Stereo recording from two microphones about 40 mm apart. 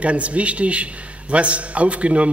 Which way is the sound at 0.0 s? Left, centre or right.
Right.